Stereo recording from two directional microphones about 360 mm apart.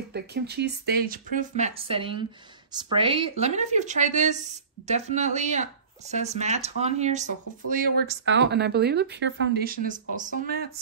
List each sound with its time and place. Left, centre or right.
0.1 s speech: right